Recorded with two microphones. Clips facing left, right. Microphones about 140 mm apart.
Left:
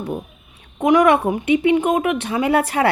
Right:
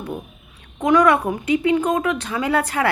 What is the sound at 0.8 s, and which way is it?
A woman's voice, 20° left (ahead or behind).